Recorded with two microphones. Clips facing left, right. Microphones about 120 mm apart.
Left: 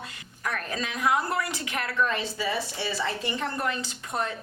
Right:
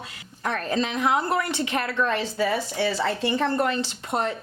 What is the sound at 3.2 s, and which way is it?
A woman's voice, 30° right (ahead or behind).